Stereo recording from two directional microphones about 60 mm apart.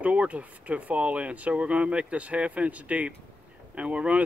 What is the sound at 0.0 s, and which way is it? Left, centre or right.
Speech, right.